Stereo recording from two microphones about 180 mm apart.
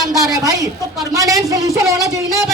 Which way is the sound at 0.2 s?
20° right (ahead or behind).